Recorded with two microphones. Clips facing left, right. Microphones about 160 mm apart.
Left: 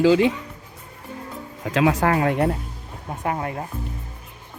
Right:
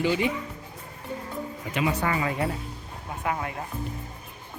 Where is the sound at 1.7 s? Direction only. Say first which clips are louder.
Left 7 dB; 90° left; by 2.5 s 60° left (ahead or behind).